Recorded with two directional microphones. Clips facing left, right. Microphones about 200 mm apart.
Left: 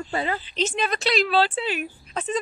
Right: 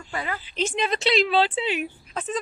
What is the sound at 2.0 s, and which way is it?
Speech, centre (ahead or behind).